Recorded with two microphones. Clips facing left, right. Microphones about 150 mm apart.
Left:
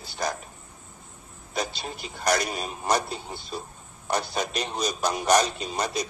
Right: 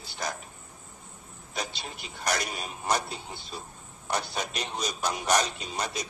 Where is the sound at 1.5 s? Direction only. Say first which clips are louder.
Left 5 dB; 40° left (ahead or behind).